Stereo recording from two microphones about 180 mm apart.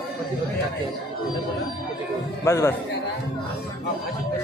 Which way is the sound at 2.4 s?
15° left (ahead or behind).